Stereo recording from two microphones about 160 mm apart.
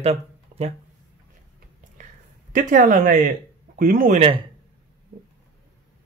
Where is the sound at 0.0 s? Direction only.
40° right (ahead or behind).